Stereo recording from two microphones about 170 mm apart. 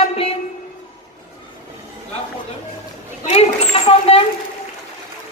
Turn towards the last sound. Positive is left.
turn(degrees=35)  # may be behind; listen again after turning